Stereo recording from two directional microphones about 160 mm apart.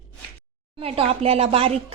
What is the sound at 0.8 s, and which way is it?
Speech, 35° right (ahead or behind).